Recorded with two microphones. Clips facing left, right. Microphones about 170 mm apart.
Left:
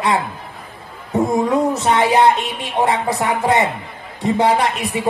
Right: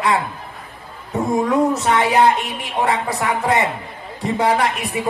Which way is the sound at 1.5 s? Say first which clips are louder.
Even; 25° left (ahead or behind).